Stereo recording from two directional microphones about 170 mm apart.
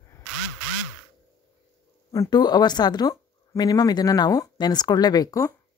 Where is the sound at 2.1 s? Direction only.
25° left (ahead or behind).